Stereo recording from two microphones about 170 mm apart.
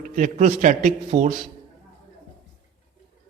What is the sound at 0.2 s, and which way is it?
A man's voice, 45° right (ahead or behind).